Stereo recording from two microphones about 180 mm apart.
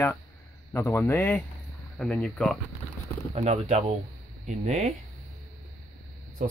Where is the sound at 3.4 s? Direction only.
35° right (ahead or behind).